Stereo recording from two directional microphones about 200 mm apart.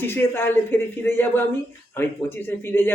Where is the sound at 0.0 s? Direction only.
10° left (ahead or behind).